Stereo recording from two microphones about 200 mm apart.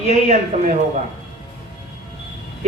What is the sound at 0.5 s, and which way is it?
Speech, 40° right (ahead or behind).